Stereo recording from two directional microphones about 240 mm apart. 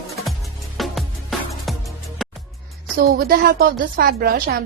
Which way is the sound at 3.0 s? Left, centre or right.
Right.